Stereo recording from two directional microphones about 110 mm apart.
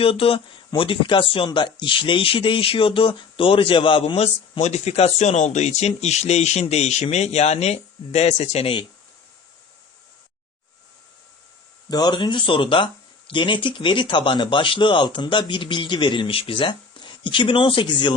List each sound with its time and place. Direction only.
0.0 s speech: 60° left (ahead or behind)
1.5 s speech: 45° left (ahead or behind)
4.6 s speech: 80° left; by 8.8 s 65° left (ahead or behind)
11.9 s speech: 40° left (ahead or behind)